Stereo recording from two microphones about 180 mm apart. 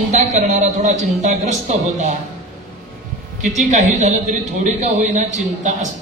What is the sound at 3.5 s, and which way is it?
A woman's voice, 40° right (ahead or behind).